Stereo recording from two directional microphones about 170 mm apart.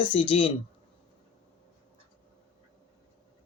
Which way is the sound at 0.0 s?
30° left (ahead or behind).